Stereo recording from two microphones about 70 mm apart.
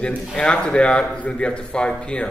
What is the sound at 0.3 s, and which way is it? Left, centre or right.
Speech, centre.